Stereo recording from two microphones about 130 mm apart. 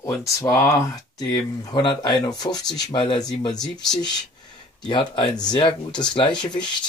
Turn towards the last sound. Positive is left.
turn(degrees=35)  # may be behind; listen again after turning